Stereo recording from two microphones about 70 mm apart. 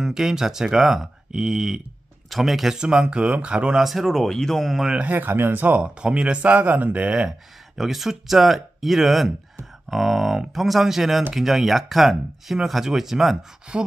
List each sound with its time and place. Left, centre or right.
0.0 s speech: centre
5.1 s speech: right
7.7 s speech: centre